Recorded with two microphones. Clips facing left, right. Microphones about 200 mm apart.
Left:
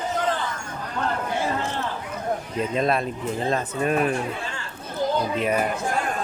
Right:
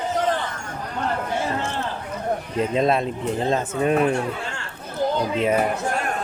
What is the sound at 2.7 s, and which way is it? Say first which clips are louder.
Speech: right 2 dB; 20° right (ahead or behind).